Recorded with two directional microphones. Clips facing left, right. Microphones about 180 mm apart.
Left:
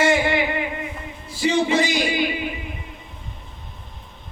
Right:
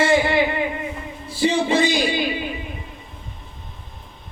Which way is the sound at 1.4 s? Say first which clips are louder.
Right 1 dB; 30° right (ahead or behind).